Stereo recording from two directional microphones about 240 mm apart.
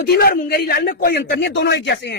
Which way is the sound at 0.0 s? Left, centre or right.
Left.